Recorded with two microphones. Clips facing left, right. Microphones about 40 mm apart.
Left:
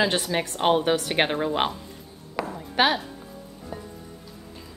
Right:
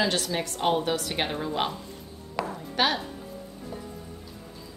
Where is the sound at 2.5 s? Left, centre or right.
Centre.